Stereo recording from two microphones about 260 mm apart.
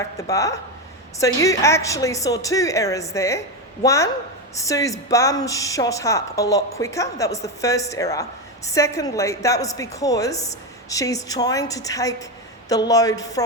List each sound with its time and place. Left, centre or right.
0.2 s a woman's voice: centre
10.3 s a woman's voice: left
10.8 s a woman's voice: centre